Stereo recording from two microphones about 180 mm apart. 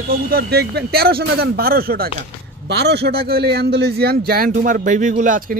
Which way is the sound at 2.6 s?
65° right (ahead or behind).